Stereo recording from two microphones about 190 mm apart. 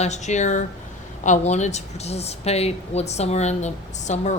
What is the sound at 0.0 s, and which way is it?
Speech, 35° left (ahead or behind).